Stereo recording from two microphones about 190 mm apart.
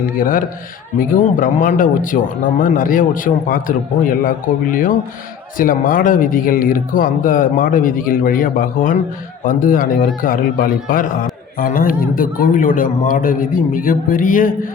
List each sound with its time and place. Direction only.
0.2 s speech: 45° left (ahead or behind)